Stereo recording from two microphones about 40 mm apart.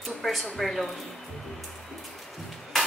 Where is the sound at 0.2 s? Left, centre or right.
Centre.